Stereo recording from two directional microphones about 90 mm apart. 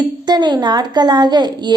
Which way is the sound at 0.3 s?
50° right (ahead or behind).